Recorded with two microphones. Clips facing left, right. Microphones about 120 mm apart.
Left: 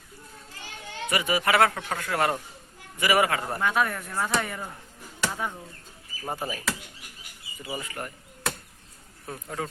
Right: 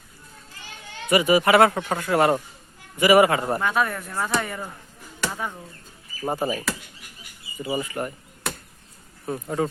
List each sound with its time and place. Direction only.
1.1 s speech: 10° right (ahead or behind)
3.6 s speech: centre (ahead or behind)
6.2 s speech: 25° right (ahead or behind)
7.6 s speech: 10° right (ahead or behind)